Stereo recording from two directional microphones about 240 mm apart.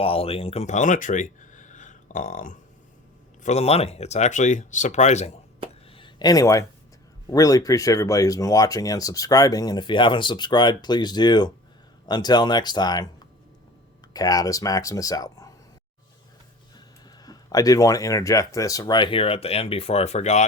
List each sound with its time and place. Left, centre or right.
0.0 s speech: left
5.9 s a sound: centre
7.3 s speech: centre
14.1 s speech: centre
17.2 s speech: centre